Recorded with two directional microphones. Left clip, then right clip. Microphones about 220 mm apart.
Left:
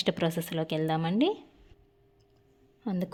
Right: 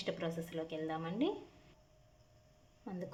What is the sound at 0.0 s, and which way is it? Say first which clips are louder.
A woman's voice: left 10 dB; 45° left (ahead or behind).